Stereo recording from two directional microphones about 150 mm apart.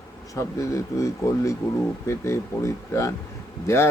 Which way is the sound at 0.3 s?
20° left (ahead or behind).